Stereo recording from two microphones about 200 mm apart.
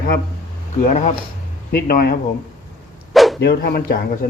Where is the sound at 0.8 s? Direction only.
35° left (ahead or behind).